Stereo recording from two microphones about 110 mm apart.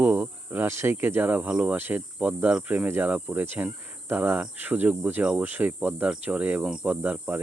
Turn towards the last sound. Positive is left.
turn(degrees=-15)  # may be behind; listen again after turning